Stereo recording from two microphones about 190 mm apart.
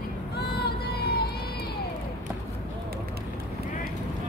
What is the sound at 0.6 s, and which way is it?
Vehicle, 60° left (ahead or behind).